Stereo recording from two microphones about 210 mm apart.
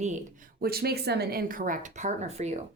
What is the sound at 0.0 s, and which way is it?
Speech, 35° right (ahead or behind).